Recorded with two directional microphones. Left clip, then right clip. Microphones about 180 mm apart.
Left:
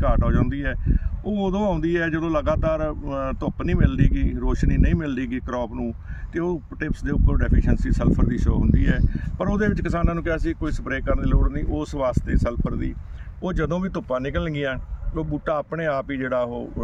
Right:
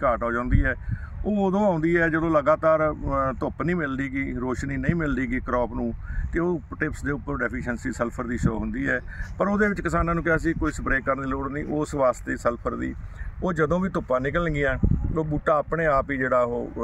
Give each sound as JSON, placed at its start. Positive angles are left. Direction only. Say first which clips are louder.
{"t": 0.0, "sound": "speech", "louder": "right 1 dB", "side_deg": 15}